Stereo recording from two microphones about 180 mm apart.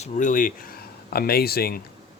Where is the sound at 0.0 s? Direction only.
45° left (ahead or behind).